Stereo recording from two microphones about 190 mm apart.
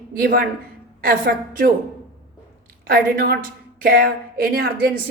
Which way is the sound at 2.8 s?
50° right (ahead or behind).